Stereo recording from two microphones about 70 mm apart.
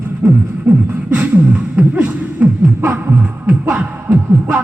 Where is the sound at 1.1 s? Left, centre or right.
Right.